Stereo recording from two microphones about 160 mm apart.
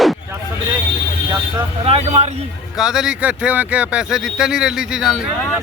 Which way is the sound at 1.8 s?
40° right (ahead or behind).